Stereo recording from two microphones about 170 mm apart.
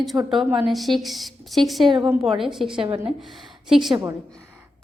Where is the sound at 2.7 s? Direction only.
30° right (ahead or behind).